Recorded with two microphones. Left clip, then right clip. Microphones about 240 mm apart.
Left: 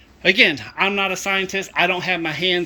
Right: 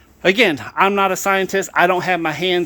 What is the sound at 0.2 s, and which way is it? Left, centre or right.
Speech, centre.